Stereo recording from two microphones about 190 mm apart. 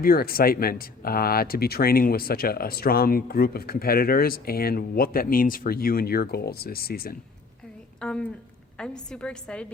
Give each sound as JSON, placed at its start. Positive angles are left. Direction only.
{"t": 0.0, "sound": "speech", "side_deg": 50}
{"t": 8.0, "sound": "a woman's voice", "side_deg": 5}